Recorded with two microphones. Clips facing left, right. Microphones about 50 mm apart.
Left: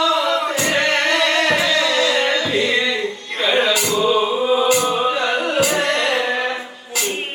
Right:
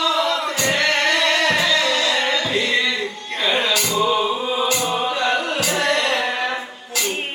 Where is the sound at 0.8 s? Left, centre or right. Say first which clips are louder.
Left 1 dB; left.